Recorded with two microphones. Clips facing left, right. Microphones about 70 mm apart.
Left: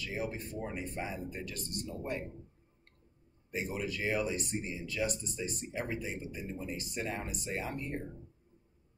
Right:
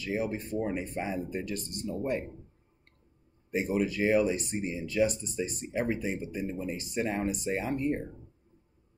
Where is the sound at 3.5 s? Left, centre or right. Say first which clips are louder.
Right 8 dB; right.